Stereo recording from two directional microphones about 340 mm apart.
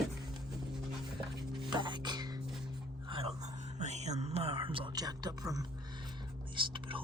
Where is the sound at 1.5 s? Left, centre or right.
Centre.